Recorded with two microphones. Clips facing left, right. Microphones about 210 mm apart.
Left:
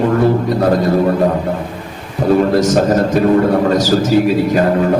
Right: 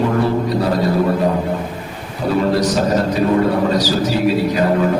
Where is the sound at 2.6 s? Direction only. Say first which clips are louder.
Left 4 dB; 45° left (ahead or behind).